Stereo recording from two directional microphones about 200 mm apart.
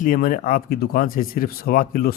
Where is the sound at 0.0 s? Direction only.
45° left (ahead or behind).